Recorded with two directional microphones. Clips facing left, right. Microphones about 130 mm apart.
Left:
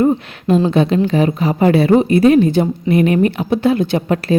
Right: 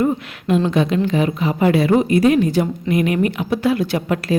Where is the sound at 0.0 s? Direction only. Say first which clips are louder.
Left 4 dB; 35° left (ahead or behind).